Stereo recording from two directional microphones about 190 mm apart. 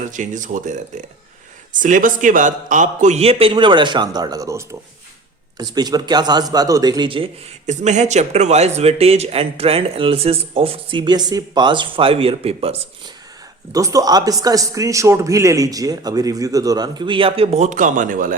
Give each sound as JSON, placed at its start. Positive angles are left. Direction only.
{"t": 0.1, "sound": "speech", "side_deg": -40}
{"t": 1.8, "sound": "a man's voice", "side_deg": -45}
{"t": 7.7, "sound": "speech", "side_deg": -40}
{"t": 13.7, "sound": "a man's voice", "side_deg": -20}